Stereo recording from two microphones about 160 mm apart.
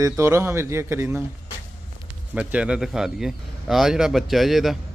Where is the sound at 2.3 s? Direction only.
5° right (ahead or behind).